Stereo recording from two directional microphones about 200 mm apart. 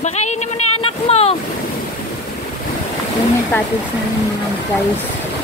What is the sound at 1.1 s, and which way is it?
Boat, 30° left (ahead or behind).